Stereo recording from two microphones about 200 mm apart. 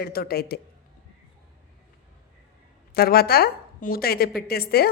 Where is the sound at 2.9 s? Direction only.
50° left (ahead or behind).